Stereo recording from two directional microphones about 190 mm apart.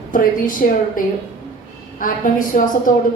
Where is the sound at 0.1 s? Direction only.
45° left (ahead or behind).